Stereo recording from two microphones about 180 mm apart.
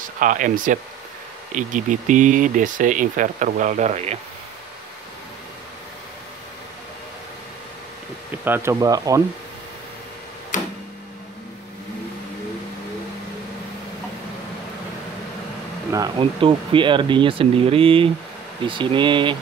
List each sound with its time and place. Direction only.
0.2 s speech: 45° right (ahead or behind)
8.3 s speech: 10° right (ahead or behind)
10.5 s tick-tock: 45° left (ahead or behind)
16.2 s speech: 30° right (ahead or behind)